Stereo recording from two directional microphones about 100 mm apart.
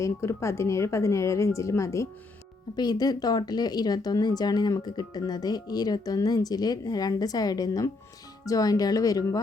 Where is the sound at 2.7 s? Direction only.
45° left (ahead or behind).